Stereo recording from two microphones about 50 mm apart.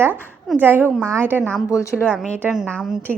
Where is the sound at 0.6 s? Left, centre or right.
Right.